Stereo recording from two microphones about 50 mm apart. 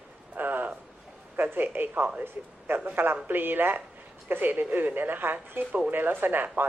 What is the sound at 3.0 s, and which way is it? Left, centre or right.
Speech, right.